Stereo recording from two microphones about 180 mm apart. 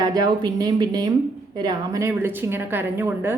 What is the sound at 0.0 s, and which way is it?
A woman's voice, 20° right (ahead or behind).